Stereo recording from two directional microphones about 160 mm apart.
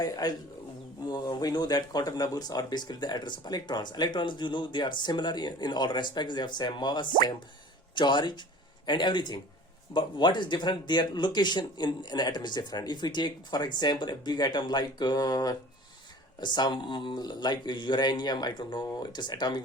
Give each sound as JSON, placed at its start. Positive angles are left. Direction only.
{"t": 0.0, "sound": "speech", "side_deg": 25}